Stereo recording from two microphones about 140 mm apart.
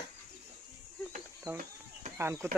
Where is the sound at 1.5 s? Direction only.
15° right (ahead or behind).